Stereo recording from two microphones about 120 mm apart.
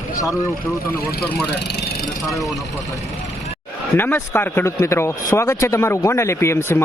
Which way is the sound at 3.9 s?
20° left (ahead or behind).